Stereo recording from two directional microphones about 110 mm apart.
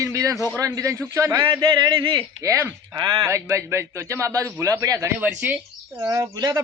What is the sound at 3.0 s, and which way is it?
Speech, 40° right (ahead or behind).